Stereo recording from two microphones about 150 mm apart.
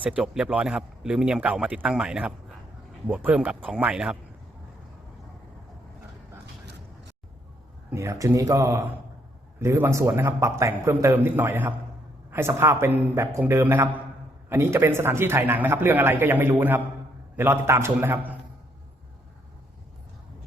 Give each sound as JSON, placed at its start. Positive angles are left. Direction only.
{"t": 0.0, "sound": "a man's voice", "side_deg": -10}
{"t": 7.9, "sound": "a man's voice", "side_deg": -20}